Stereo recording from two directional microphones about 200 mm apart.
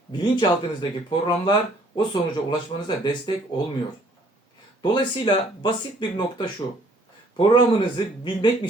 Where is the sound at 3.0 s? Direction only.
20° left (ahead or behind).